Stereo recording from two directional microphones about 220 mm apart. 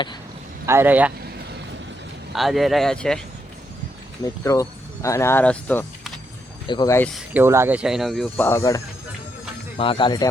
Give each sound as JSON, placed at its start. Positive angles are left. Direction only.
{"t": 0.6, "sound": "speech", "side_deg": -10}
{"t": 2.3, "sound": "speech", "side_deg": 0}
{"t": 4.2, "sound": "speech", "side_deg": 15}
{"t": 7.1, "sound": "speech", "side_deg": -10}